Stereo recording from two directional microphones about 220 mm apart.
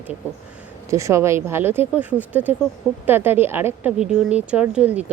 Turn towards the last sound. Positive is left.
turn(degrees=-5)  # may be behind; listen again after turning